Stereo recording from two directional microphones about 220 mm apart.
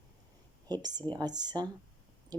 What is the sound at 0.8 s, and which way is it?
Speech, 20° right (ahead or behind).